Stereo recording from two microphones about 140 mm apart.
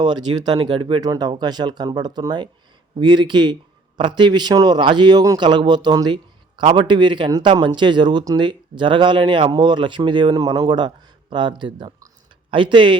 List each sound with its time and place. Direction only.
0.0 s speech: 30° right (ahead or behind)